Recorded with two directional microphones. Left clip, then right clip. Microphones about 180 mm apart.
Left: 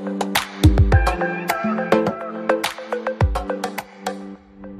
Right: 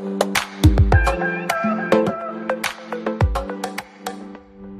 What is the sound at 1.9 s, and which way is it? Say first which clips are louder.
Music: right 1 dB; centre (ahead or behind).